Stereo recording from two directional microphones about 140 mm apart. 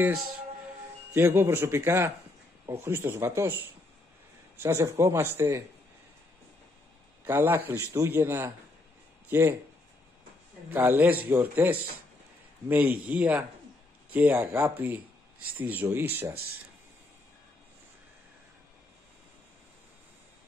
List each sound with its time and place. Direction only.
1.1 s a man's voice: 15° right (ahead or behind)
4.6 s a man's voice: 20° right (ahead or behind)
7.2 s a man's voice: 15° right (ahead or behind)
10.7 s a man's voice: 15° right (ahead or behind)